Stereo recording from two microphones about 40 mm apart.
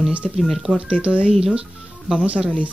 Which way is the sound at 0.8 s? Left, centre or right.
Right.